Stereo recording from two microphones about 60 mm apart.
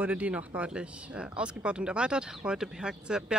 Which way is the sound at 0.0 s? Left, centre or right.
Right.